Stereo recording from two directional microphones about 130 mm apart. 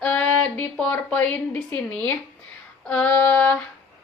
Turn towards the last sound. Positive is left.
turn(degrees=10)  # may be behind; listen again after turning